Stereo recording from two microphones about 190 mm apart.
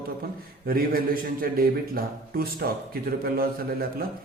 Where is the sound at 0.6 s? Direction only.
50° right (ahead or behind).